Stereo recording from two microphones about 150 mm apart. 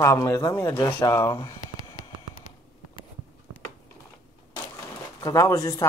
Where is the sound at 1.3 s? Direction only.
25° left (ahead or behind).